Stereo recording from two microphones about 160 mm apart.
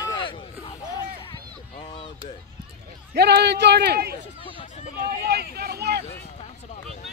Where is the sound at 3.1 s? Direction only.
90° right.